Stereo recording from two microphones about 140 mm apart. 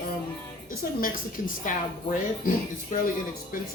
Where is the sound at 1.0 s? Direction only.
75° left (ahead or behind).